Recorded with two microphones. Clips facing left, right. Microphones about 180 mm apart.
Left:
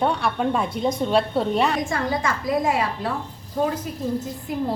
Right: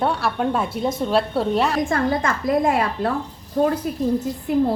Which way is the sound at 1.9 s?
50° right (ahead or behind).